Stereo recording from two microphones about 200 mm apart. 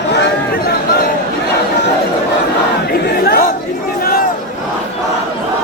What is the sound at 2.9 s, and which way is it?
Chatter, 50° left (ahead or behind).